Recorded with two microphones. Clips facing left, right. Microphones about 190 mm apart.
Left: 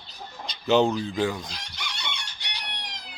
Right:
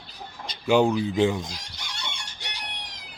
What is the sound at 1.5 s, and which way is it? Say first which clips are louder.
Chicken: left 1 dB; 70° left (ahead or behind).